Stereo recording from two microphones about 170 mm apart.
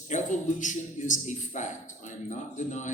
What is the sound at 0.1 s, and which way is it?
A man's voice, 45° left (ahead or behind).